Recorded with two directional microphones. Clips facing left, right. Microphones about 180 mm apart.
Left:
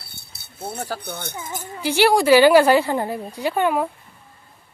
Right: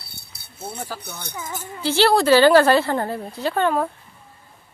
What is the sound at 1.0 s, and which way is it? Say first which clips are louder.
Speech: left 5 dB; 55° left (ahead or behind).